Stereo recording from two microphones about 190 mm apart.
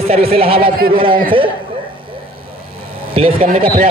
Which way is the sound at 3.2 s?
30° right (ahead or behind).